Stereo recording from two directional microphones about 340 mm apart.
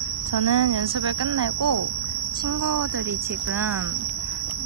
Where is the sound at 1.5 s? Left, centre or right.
Right.